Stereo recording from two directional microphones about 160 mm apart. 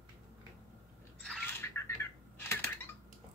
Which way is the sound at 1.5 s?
15° left (ahead or behind).